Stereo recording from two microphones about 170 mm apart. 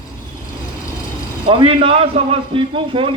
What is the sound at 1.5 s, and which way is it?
A man's voice, 30° right (ahead or behind).